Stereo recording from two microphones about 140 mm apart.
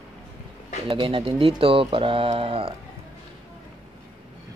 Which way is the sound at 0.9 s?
40° right (ahead or behind).